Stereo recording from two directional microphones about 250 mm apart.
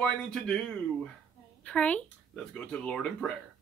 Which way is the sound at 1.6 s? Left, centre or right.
Centre.